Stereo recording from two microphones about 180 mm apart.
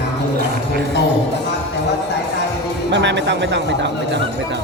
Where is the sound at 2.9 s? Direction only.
80° right.